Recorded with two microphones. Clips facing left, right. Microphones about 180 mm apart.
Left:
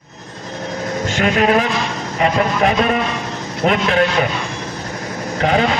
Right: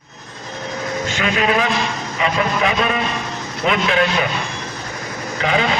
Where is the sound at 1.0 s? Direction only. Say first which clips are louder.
Left 5 dB; 45° left (ahead or behind).